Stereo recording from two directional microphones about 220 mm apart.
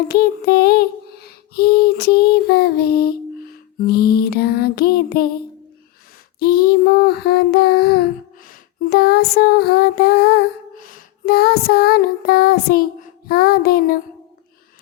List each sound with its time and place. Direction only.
0.1 s child singing: 45° left (ahead or behind)
6.4 s child singing: 45° left (ahead or behind)